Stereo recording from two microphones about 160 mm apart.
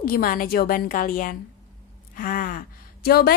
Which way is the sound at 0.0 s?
65° left (ahead or behind).